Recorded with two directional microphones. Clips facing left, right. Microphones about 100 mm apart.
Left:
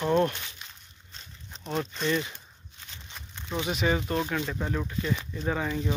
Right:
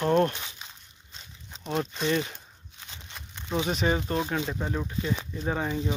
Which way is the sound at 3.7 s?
35° right (ahead or behind).